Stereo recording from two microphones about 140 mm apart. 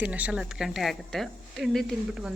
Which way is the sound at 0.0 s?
10° right (ahead or behind).